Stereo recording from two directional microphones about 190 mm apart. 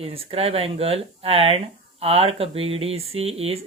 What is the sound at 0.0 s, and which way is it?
Speech, 30° right (ahead or behind).